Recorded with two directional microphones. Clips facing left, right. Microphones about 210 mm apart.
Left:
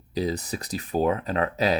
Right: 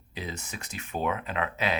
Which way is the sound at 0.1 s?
35° left (ahead or behind).